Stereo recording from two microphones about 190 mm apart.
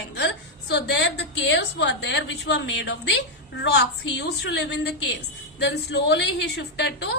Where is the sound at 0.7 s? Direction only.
60° left (ahead or behind).